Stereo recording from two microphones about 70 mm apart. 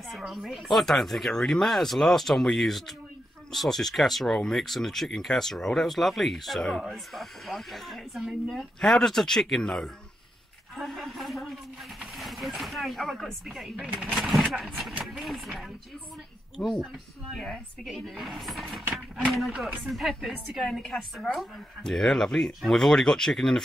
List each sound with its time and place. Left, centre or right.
0.1 s a woman's voice: centre
13.7 s speech: centre
14.1 s a woman's voice: centre